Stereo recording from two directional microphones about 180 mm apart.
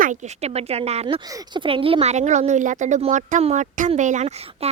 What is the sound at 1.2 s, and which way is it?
A child's voice, 20° right (ahead or behind).